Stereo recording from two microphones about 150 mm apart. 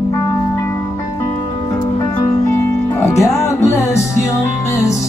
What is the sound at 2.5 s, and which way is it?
Music, 15° left (ahead or behind).